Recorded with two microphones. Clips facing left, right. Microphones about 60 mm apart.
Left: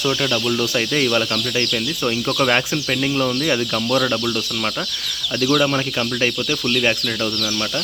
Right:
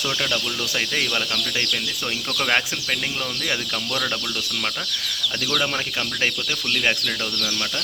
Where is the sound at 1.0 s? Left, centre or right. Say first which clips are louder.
Left 6 dB; centre.